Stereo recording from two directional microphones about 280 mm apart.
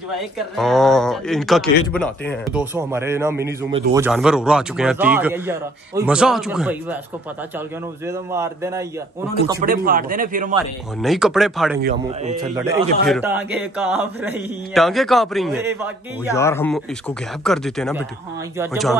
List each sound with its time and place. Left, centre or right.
0.6 s a man's voice: centre
8.1 s speech: centre
9.6 s a man's voice: right
11.0 s a man's voice: centre
11.8 s a man's voice: right
12.4 s a man's voice: centre
16.3 s a man's voice: centre